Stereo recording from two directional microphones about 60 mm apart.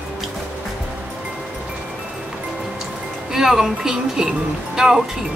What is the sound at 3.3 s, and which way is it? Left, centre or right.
Speech, centre.